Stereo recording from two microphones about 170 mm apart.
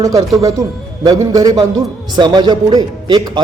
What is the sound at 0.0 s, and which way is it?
A man's voice, 20° right (ahead or behind).